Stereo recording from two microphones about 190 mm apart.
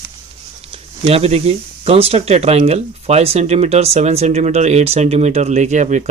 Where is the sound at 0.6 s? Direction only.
30° right (ahead or behind).